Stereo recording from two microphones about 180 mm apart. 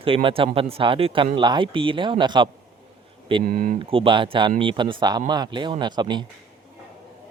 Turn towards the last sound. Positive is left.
turn(degrees=-25)  # may be behind; listen again after turning